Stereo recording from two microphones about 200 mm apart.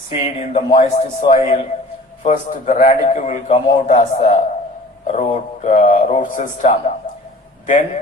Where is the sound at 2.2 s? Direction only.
35° left (ahead or behind).